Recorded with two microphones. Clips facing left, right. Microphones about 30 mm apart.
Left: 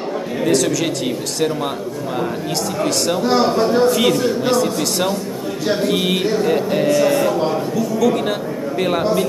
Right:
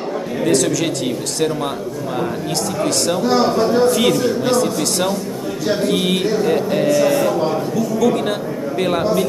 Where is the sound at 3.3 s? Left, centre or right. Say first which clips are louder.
Even; centre.